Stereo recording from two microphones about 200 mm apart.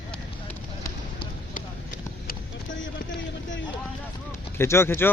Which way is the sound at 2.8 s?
70° left (ahead or behind).